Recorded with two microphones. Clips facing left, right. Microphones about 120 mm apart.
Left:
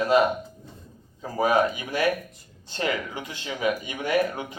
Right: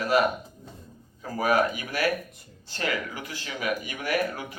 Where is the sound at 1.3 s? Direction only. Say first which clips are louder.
Left 2 dB; 20° left (ahead or behind).